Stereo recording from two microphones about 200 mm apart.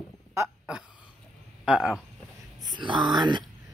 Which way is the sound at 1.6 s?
5° right (ahead or behind).